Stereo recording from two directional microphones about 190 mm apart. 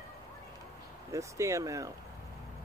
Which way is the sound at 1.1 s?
15° right (ahead or behind).